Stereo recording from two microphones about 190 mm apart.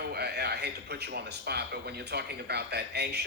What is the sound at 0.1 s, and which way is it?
Speech, 60° right (ahead or behind).